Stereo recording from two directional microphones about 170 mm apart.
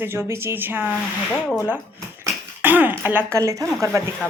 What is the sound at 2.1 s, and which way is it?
Speech, 10° right (ahead or behind).